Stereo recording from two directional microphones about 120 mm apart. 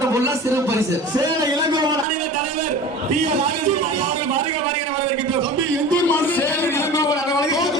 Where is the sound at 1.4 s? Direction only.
35° right (ahead or behind).